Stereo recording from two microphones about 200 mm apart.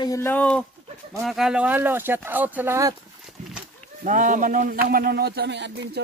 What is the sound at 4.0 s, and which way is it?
Speech, 40° right (ahead or behind).